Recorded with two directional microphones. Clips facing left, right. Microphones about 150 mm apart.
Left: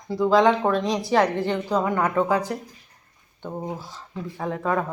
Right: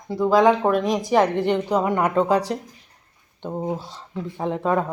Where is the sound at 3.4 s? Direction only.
15° right (ahead or behind).